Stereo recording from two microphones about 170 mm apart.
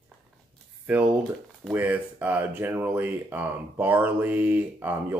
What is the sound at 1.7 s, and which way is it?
Speech, 10° right (ahead or behind).